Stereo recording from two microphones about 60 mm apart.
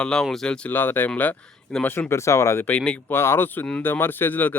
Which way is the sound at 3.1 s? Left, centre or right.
Left.